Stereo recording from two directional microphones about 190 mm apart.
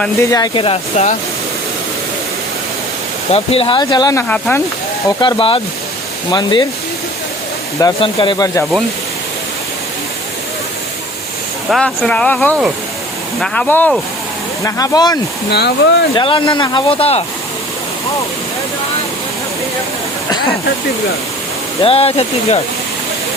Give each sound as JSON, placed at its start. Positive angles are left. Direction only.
{"t": 0.2, "sound": "speech", "side_deg": 20}
{"t": 3.3, "sound": "speech", "side_deg": 30}
{"t": 5.0, "sound": "speech", "side_deg": 25}
{"t": 7.8, "sound": "speech", "side_deg": 25}
{"t": 11.7, "sound": "speech", "side_deg": 5}
{"t": 14.6, "sound": "speech", "side_deg": 20}
{"t": 15.4, "sound": "speech", "side_deg": 60}
{"t": 16.1, "sound": "speech", "side_deg": 25}
{"t": 21.8, "sound": "speech", "side_deg": 30}